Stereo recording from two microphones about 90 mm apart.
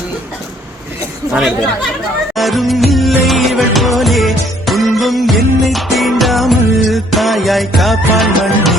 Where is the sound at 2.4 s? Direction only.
Centre (ahead or behind).